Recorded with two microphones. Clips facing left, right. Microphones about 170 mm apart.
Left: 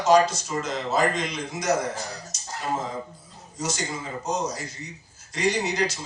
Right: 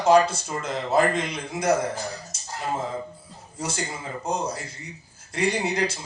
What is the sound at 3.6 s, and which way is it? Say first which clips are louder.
Speech: left 1 dB; 55° right (ahead or behind).